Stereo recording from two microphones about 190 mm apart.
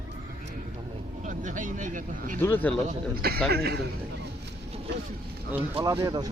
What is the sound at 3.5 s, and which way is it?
Speech, 55° right (ahead or behind).